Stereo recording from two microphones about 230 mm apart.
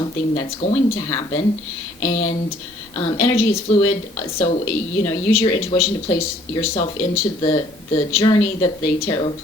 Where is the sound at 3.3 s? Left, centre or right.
Centre.